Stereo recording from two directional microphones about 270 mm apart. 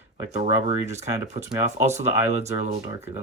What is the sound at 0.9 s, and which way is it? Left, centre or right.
Speech, right.